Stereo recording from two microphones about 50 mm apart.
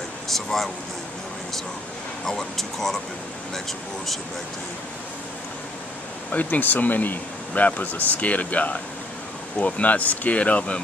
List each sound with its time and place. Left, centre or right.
0.3 s speech: centre
2.2 s speech: centre
6.3 s speech: left